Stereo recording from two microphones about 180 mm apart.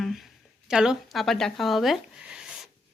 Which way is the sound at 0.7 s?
5° right (ahead or behind).